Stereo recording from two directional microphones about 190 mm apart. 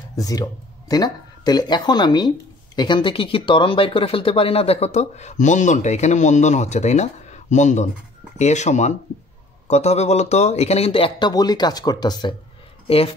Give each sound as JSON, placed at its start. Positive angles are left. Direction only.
{"t": 0.1, "sound": "speech", "side_deg": 20}